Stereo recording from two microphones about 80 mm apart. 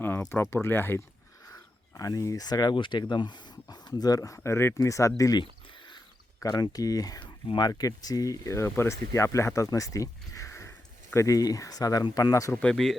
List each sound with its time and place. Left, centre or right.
0.5 s speech: left
2.0 s speech: left
5.4 s a sound: left
6.4 s speech: left
7.2 s speech: left
7.7 s speech: left
12.3 s speech: left
12.6 s speech: centre